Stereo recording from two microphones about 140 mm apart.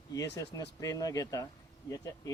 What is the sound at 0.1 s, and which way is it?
Speech, 25° left (ahead or behind).